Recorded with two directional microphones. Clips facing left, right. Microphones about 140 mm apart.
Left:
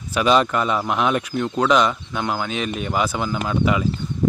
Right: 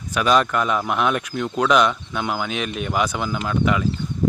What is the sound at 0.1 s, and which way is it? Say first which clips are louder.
A man's voice: left 1 dB; 5° left (ahead or behind).